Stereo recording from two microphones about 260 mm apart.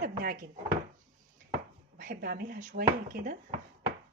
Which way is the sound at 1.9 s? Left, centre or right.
Right.